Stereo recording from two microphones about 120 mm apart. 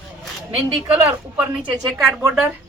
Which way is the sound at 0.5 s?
15° right (ahead or behind).